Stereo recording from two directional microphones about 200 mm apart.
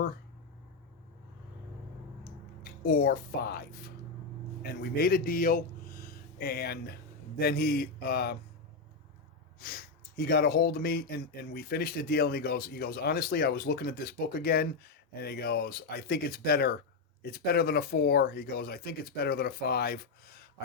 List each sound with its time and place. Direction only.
2.8 s speech: 45° left (ahead or behind)
9.6 s speech: 45° left (ahead or behind)